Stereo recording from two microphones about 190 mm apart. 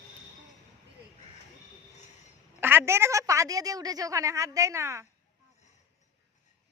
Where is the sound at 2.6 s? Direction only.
10° right (ahead or behind).